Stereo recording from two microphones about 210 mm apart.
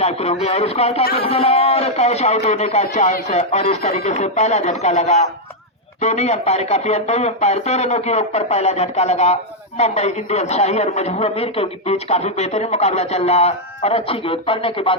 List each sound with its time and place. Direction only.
0.0 s speech: 30° left (ahead or behind)